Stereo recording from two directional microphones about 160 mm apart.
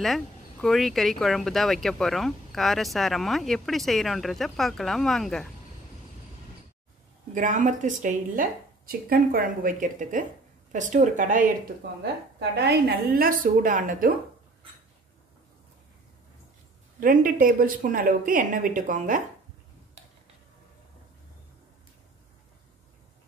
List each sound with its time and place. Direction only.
0.0 s speech: centre (ahead or behind)
7.3 s a woman's voice: 50° right (ahead or behind)
12.0 s a woman's voice: 90° right; by 14.1 s 55° right (ahead or behind)
17.0 s a woman's voice: 60° right (ahead or behind)